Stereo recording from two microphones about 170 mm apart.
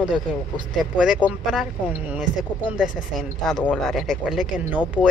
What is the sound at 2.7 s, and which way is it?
A woman's voice, centre (ahead or behind).